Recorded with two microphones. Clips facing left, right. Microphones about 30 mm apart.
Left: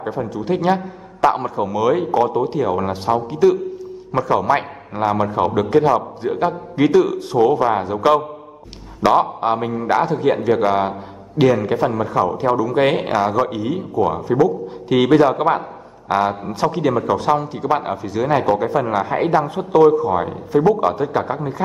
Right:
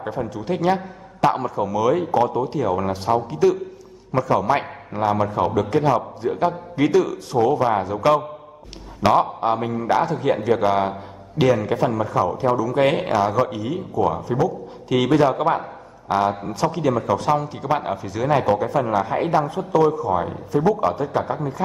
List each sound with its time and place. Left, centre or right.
0.0 s a man's voice: centre
18.9 s speech: left
19.3 s a man's voice: left
20.9 s a man's voice: left